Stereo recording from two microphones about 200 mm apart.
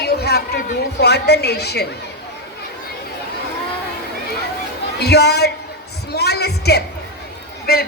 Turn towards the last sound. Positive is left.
turn(degrees=50)  # may be behind; listen again after turning